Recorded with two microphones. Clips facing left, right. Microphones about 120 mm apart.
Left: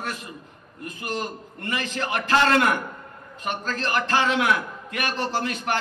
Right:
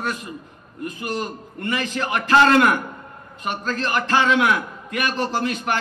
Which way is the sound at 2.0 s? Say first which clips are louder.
Right 5 dB; 25° right (ahead or behind).